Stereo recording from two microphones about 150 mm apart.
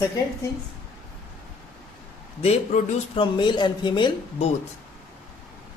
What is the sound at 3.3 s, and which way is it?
Speech, 30° left (ahead or behind).